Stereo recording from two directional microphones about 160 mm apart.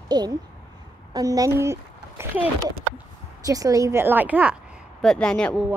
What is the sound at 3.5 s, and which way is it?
A woman's voice, 20° right (ahead or behind).